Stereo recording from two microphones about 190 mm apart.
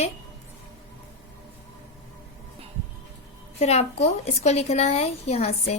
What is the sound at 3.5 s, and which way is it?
A woman's voice, 35° left (ahead or behind).